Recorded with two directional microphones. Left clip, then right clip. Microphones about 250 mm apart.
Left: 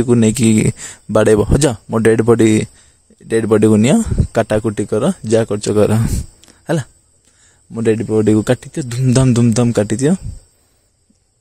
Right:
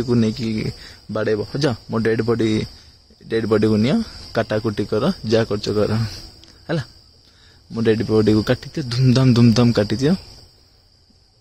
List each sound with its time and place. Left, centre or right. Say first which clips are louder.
0.0 s speech: left 7 dB; left